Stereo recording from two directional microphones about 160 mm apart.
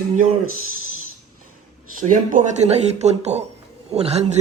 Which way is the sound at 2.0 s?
55° right (ahead or behind).